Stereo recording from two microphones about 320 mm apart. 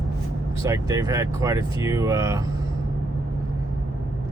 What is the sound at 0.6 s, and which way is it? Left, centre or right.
Speech, centre.